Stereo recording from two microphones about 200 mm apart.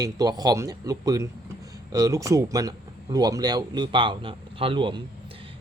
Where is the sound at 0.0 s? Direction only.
20° right (ahead or behind).